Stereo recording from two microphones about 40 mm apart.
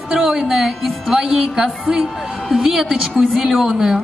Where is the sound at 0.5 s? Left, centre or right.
Centre.